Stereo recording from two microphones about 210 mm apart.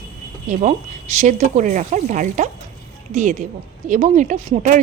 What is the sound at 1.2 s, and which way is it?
Speech, 35° right (ahead or behind).